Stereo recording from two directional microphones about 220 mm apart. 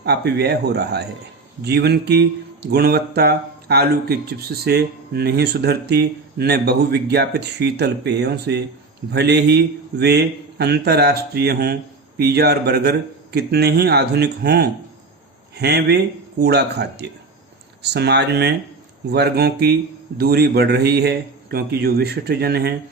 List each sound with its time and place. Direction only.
0.0 s speech: 50° right (ahead or behind)